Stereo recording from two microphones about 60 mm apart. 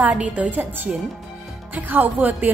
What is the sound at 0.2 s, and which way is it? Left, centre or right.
Speech, right.